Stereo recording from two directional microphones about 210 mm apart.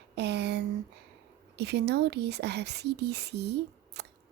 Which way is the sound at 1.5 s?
50° right (ahead or behind).